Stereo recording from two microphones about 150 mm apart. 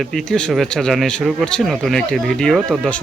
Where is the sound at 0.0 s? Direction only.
Centre (ahead or behind).